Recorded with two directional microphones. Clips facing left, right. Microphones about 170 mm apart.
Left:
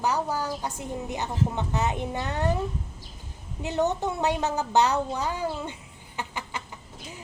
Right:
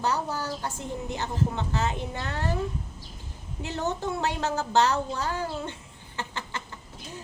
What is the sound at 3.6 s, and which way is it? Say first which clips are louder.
A woman's voice: left 4 dB; 15° left (ahead or behind).